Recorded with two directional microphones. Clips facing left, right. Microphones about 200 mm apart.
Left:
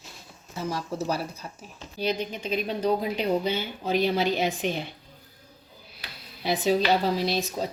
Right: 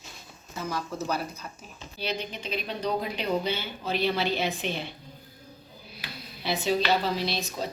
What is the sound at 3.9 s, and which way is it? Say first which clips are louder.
A woman's voice: left 3 dB; 45° left (ahead or behind).